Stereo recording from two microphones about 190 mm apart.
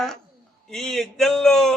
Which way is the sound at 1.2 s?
Centre (ahead or behind).